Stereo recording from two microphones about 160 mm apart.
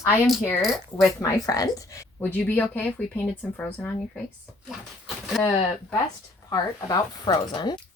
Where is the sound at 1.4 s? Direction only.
20° left (ahead or behind).